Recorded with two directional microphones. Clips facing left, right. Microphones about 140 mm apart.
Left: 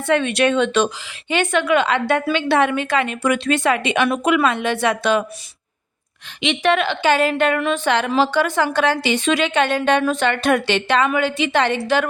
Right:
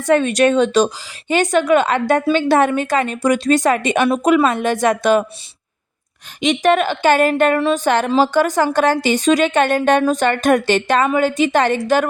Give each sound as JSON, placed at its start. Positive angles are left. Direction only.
{"t": 0.0, "sound": "a woman's voice", "side_deg": -40}
{"t": 6.4, "sound": "a woman's voice", "side_deg": -40}